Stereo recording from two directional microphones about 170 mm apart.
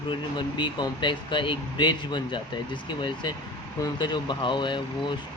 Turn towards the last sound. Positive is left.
turn(degrees=30)  # may be behind; listen again after turning